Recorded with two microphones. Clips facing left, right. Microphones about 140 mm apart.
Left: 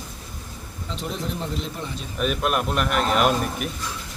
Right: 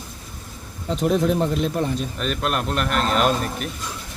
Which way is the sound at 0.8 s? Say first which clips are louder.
Right 11 dB; 50° right (ahead or behind).